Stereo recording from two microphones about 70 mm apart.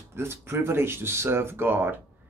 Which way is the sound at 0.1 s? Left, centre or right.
Right.